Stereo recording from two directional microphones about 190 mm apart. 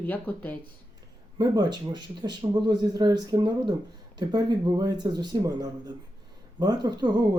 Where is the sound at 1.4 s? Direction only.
20° right (ahead or behind).